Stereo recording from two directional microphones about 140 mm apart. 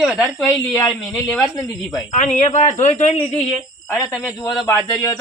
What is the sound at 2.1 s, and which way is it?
A man's voice, 55° left (ahead or behind).